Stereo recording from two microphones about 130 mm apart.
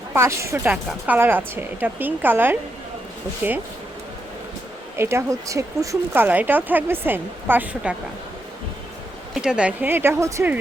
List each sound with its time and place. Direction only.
0.1 s a woman's voice: 20° right (ahead or behind)
4.9 s a woman's voice: 20° right (ahead or behind)
9.3 s a woman's voice: 5° right (ahead or behind); by 10.5 s 20° right (ahead or behind)